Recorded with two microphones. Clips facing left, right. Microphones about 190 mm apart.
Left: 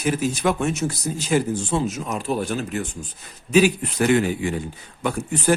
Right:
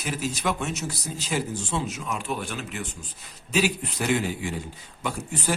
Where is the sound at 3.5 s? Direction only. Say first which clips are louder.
Left 8 dB; 55° left (ahead or behind).